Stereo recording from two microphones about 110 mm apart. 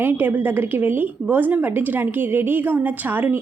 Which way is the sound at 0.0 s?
20° right (ahead or behind).